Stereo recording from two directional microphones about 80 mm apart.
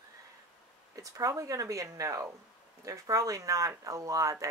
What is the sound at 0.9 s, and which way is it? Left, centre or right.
Speech, right.